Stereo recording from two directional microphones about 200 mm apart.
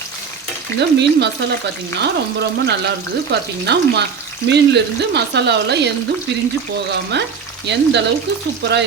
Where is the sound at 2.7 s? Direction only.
55° right (ahead or behind).